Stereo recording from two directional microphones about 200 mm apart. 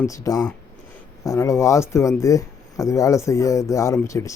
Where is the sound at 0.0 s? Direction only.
15° left (ahead or behind).